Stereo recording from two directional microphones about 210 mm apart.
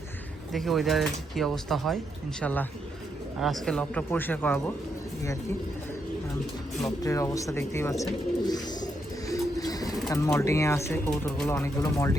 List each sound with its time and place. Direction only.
0.5 s speech: centre (ahead or behind)
6.8 s bird: 15° left (ahead or behind)
10.1 s speech: 15° left (ahead or behind)